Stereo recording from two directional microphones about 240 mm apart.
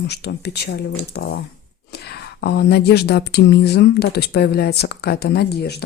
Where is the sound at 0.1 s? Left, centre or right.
Left.